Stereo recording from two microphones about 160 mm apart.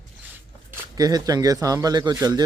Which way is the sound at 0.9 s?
25° right (ahead or behind).